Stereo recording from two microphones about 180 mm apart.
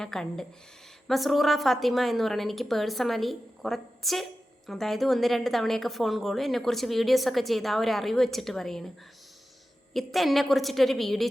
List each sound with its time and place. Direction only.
0.0 s a woman's voice: 5° left (ahead or behind)
9.9 s a woman's voice: centre (ahead or behind)